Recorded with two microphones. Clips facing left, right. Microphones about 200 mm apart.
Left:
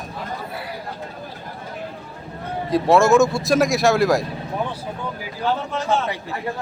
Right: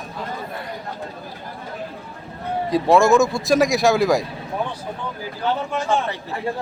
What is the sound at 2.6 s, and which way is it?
A man's voice, centre (ahead or behind).